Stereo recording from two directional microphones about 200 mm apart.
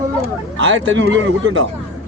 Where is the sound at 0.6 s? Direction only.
70° right (ahead or behind).